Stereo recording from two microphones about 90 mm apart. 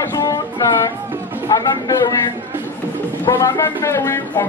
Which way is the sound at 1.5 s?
45° left (ahead or behind).